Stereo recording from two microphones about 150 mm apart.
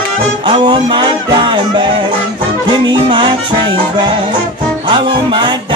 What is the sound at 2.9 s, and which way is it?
Music, 30° right (ahead or behind).